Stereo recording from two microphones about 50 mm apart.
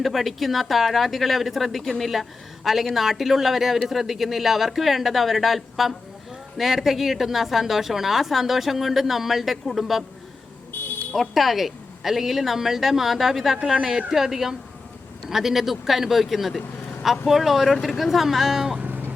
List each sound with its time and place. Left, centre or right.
0.0 s a woman's voice: centre
10.7 s smoke detector: left
11.1 s a woman's voice: centre
18.8 s music: right